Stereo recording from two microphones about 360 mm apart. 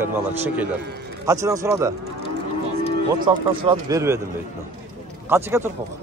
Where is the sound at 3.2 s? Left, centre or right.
Centre.